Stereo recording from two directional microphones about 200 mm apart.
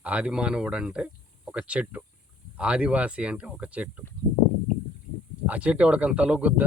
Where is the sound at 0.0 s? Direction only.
5° right (ahead or behind).